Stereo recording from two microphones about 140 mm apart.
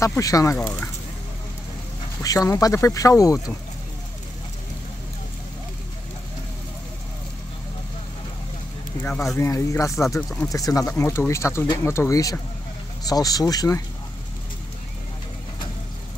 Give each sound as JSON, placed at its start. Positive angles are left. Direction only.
{"t": 0.0, "sound": "speech", "side_deg": 25}
{"t": 2.2, "sound": "speech", "side_deg": 25}
{"t": 9.0, "sound": "speech", "side_deg": 15}